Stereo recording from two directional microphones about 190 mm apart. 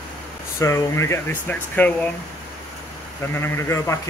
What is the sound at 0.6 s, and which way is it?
Speech, 15° left (ahead or behind).